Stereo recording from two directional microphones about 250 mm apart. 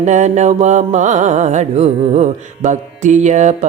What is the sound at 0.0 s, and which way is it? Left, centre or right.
Music, right.